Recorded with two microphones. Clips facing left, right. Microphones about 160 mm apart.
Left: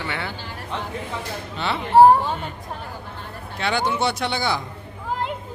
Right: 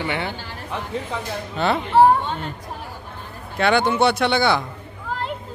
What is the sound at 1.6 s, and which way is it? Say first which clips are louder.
Speech: right 6 dB; 45° right (ahead or behind).